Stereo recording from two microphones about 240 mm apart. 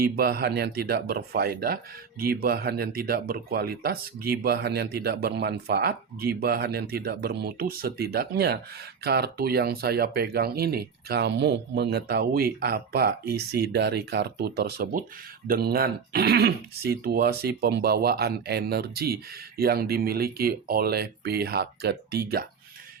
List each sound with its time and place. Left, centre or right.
0.0 s speech: right